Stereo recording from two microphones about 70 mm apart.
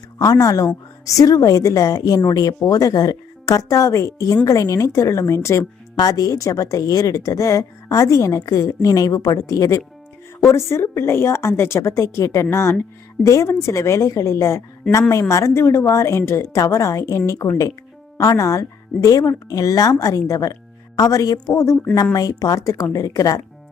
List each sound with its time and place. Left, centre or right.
0.2 s a woman's voice: left
6.0 s a woman's voice: left
10.5 s a woman's voice: left
21.5 s a woman's voice: left
22.1 s a woman's voice: left